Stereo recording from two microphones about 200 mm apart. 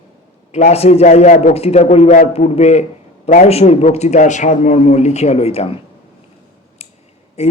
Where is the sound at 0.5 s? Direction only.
30° left (ahead or behind).